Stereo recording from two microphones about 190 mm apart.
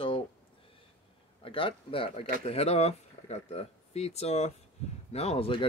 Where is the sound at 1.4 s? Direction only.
30° left (ahead or behind).